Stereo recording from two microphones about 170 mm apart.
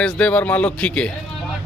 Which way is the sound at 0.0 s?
5° left (ahead or behind).